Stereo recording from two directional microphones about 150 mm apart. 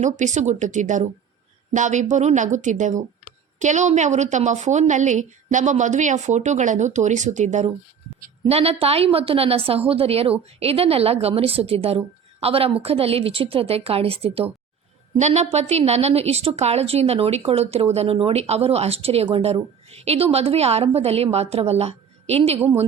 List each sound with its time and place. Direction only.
0.0 s a woman's voice: 55° right (ahead or behind)
8.4 s a woman's voice: 40° right (ahead or behind)